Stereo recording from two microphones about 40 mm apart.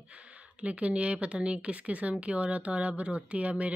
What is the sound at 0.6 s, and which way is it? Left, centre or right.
Speech, right.